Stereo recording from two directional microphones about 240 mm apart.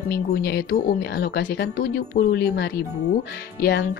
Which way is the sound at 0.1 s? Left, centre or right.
Left.